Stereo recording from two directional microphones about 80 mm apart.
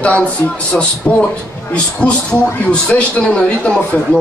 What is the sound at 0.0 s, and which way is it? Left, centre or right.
A man's voice, centre.